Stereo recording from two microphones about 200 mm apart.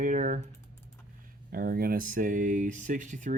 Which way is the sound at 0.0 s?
40° right (ahead or behind).